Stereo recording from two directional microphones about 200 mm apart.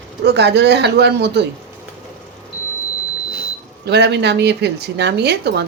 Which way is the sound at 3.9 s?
55° right (ahead or behind).